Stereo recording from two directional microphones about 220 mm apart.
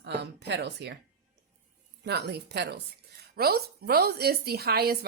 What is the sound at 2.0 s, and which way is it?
A woman's voice, 50° right (ahead or behind).